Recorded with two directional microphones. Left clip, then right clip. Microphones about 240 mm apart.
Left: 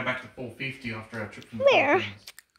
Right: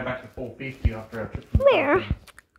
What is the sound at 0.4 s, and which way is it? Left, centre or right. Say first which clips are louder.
Speech: right 4 dB; left.